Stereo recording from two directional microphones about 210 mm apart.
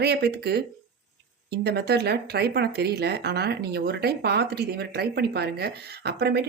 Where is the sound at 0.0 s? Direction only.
50° right (ahead or behind).